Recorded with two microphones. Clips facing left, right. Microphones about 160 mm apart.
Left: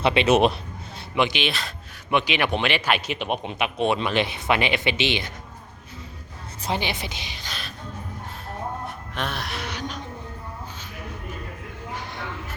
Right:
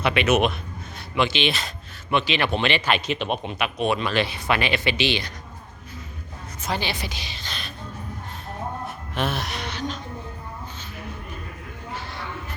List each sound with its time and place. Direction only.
0.0 s speech: 30° left (ahead or behind)
1.1 s speech: 15° left (ahead or behind)
1.5 s speech: centre (ahead or behind)
2.0 s speech: 15° left (ahead or behind)
6.7 s speech: 20° left (ahead or behind)
7.4 s a sound: 5° left (ahead or behind)
9.1 s speech: centre (ahead or behind)